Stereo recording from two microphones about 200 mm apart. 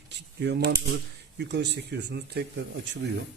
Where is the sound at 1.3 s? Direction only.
60° right (ahead or behind).